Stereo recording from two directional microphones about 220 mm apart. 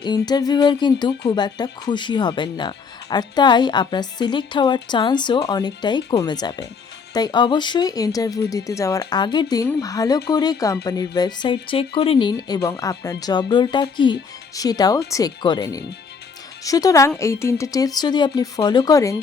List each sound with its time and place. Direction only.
0.0 s speech: 20° left (ahead or behind)